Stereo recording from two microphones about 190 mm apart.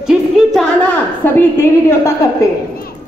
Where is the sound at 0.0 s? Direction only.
Centre (ahead or behind).